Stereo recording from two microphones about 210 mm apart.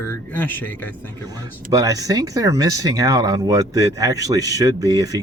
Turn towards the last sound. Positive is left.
turn(degrees=-15)  # may be behind; listen again after turning